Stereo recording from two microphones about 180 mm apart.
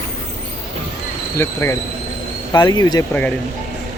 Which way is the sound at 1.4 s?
15° left (ahead or behind).